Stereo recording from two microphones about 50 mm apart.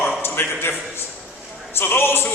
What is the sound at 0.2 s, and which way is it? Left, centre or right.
A man's voice, left.